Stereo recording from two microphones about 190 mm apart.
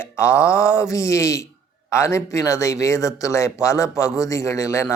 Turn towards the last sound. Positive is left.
turn(degrees=15)  # may be behind; listen again after turning